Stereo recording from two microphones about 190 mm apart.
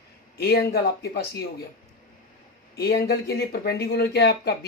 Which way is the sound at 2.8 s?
55° left (ahead or behind).